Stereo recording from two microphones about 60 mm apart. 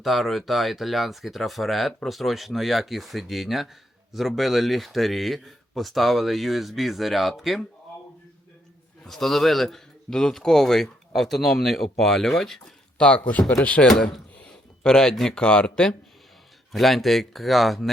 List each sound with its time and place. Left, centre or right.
0.0 s speech: centre
9.0 s speech: centre
13.0 s a man's voice: centre
13.8 s speech: centre
16.7 s speech: centre